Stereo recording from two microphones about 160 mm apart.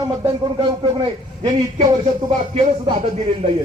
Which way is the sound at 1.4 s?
25° right (ahead or behind).